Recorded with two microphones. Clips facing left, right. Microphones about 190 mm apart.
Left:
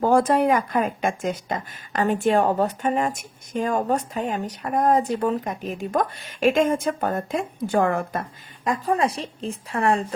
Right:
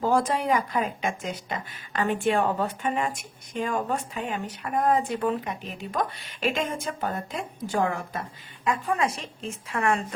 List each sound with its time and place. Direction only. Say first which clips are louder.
0.0 s speech: left 6 dB; 55° left (ahead or behind)
8.6 s a woman's voice: left 4 dB; 35° left (ahead or behind)